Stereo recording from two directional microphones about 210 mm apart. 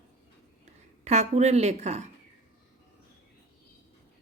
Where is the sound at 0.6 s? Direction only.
30° right (ahead or behind).